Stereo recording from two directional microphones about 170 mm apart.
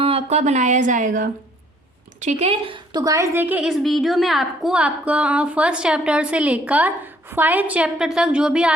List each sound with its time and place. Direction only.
0.0 s speech: 35° right (ahead or behind)
2.2 s a woman's voice: 35° right (ahead or behind); by 8.7 s 5° right (ahead or behind)